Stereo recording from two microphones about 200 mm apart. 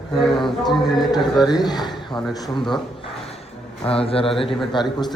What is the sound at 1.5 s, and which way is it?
Speech, 20° left (ahead or behind).